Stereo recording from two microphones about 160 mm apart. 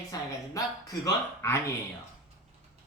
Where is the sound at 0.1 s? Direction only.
20° left (ahead or behind).